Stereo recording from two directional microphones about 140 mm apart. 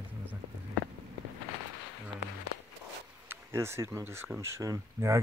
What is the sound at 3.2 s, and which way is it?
Speech, 20° right (ahead or behind).